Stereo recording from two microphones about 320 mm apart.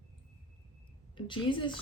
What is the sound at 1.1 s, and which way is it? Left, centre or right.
Speech, centre.